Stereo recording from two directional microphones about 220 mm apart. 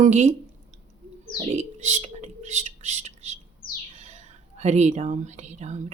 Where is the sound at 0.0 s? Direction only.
30° right (ahead or behind).